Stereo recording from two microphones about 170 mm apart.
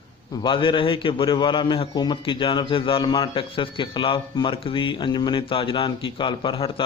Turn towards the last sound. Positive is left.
turn(degrees=30)  # may be behind; listen again after turning